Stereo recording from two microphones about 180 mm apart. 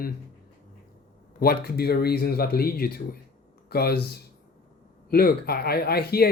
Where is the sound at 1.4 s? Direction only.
60° left (ahead or behind).